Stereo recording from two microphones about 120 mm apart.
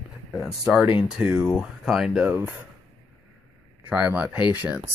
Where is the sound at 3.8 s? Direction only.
10° right (ahead or behind).